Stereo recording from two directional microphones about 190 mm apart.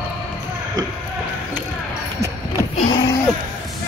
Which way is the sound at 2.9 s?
20° left (ahead or behind).